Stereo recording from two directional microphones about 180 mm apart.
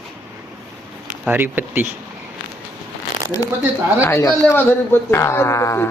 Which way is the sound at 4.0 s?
15° left (ahead or behind).